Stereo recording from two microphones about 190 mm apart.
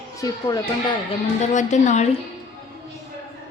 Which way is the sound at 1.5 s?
40° left (ahead or behind).